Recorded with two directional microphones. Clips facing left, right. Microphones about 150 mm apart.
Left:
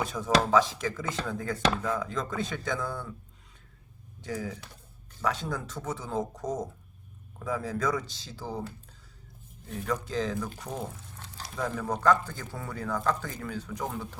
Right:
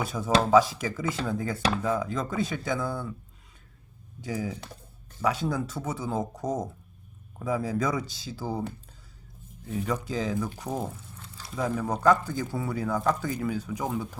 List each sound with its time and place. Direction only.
0.0 s chopping: 10° right (ahead or behind)
4.2 s chopping: 10° right (ahead or behind)
9.8 s chopping: 10° right (ahead or behind)
11.2 s a sound: 75° left (ahead or behind)
11.6 s chopping: 10° right (ahead or behind)